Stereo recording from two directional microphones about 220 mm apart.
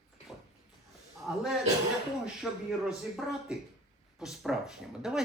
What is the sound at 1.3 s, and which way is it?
Speech, 5° right (ahead or behind).